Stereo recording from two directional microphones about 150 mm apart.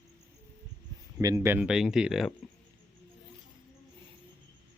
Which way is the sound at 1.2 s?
20° right (ahead or behind).